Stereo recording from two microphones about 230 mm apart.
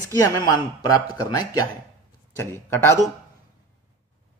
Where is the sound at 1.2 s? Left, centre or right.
Centre.